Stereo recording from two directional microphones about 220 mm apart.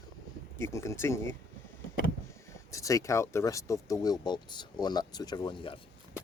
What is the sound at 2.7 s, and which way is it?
Speech, 15° left (ahead or behind).